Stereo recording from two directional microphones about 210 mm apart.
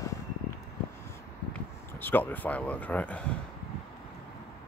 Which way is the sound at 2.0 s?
10° left (ahead or behind).